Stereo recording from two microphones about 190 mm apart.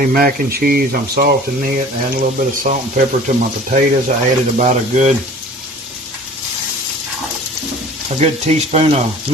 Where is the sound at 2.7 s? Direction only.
40° right (ahead or behind).